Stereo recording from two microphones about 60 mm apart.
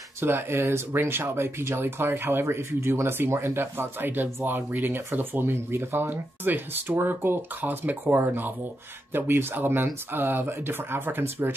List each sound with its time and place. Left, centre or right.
0.2 s speech: right